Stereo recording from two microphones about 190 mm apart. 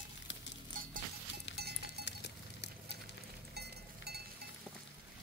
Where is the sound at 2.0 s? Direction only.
65° left (ahead or behind).